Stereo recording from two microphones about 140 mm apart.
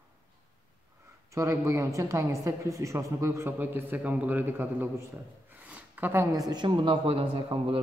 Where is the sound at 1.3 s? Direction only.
20° right (ahead or behind).